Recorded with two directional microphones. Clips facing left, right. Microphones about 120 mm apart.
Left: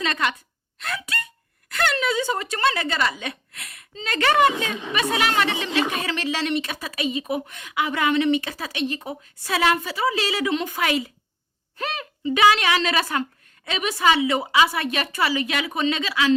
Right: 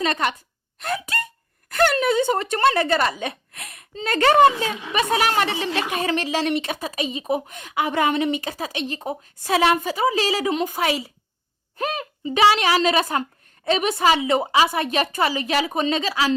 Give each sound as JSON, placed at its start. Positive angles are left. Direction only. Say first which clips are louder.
{"t": 0.0, "sound": "a woman's voice", "louder": "right 2 dB", "side_deg": -30}
{"t": 2.0, "sound": "a woman's voice", "louder": "right 4 dB", "side_deg": -50}
{"t": 3.7, "sound": "a sound", "louder": "right 5 dB", "side_deg": -50}
{"t": 4.2, "sound": "a woman's voice", "louder": "right 4 dB", "side_deg": -30}
{"t": 9.5, "sound": "a woman's voice", "louder": "right 3 dB", "side_deg": -30}
{"t": 9.8, "sound": "a woman's voice", "louder": "right 3 dB", "side_deg": -45}